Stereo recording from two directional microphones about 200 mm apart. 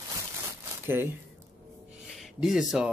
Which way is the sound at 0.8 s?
10° right (ahead or behind).